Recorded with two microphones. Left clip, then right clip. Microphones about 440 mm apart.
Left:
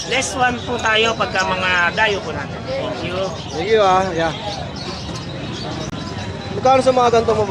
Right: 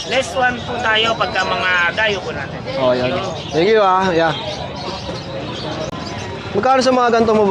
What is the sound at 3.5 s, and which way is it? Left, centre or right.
Speech, right.